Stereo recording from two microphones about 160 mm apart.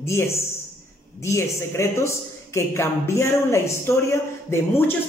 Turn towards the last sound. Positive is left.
turn(degrees=15)  # may be behind; listen again after turning